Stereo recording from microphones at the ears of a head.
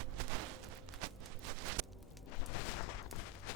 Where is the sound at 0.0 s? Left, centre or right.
Right.